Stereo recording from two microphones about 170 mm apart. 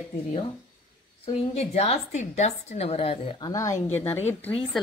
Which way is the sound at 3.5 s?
20° left (ahead or behind).